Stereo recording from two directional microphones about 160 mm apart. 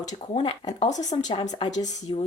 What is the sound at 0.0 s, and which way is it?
A woman's voice, 50° left (ahead or behind).